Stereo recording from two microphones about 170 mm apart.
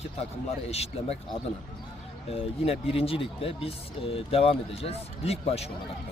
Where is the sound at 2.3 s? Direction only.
35° left (ahead or behind).